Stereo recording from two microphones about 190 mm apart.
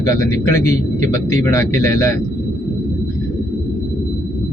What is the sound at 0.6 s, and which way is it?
Speech, 40° right (ahead or behind).